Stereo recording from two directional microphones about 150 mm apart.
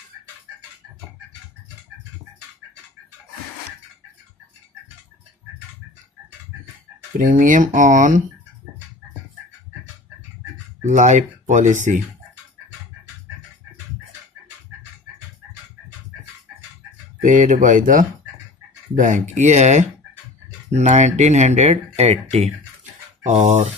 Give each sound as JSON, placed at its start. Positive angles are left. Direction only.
{"t": 7.2, "sound": "speech", "side_deg": -60}
{"t": 10.8, "sound": "speech", "side_deg": -55}
{"t": 17.2, "sound": "speech", "side_deg": -60}